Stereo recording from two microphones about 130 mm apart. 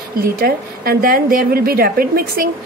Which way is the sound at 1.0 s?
90° right.